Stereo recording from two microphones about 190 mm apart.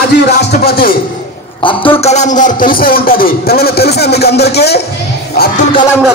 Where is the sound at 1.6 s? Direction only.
25° left (ahead or behind); by 4.8 s 60° left (ahead or behind).